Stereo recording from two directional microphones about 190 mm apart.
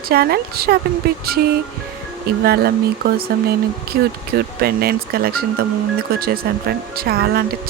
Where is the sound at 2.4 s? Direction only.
55° right (ahead or behind).